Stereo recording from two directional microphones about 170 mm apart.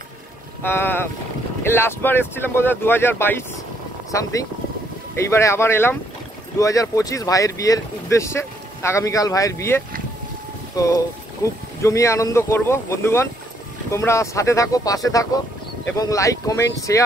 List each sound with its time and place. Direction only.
0.6 s speech: 15° left (ahead or behind)
11.4 s speech: 15° left (ahead or behind)